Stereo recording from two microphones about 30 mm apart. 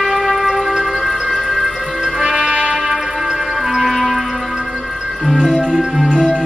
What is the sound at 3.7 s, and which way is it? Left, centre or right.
Music, centre.